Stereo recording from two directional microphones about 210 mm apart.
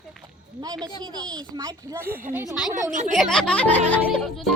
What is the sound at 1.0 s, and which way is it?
A child's voice, 20° right (ahead or behind).